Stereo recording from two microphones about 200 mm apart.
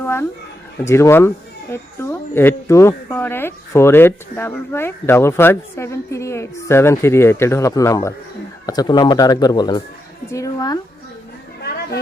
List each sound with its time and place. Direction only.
0.0 s a sound: 10° left (ahead or behind)
0.8 s a man's voice: 15° left (ahead or behind)
11.6 s chatter: 50° left (ahead or behind)